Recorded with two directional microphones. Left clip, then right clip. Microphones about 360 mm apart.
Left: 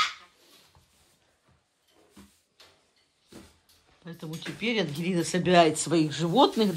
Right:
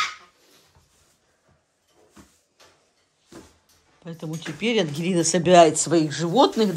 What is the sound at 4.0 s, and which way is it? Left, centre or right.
Speech, centre.